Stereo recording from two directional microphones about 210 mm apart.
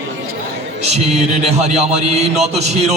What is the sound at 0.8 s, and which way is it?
Music, 30° right (ahead or behind).